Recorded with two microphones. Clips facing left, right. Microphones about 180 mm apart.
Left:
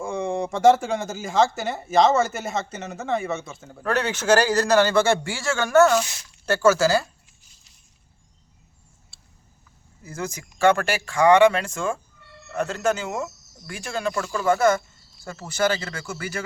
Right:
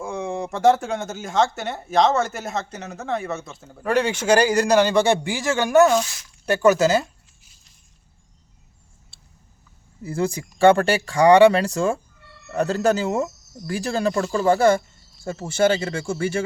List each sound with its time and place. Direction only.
0.0 s speech: centre (ahead or behind)
3.8 s a man's voice: 10° right (ahead or behind)
10.0 s speech: 30° right (ahead or behind)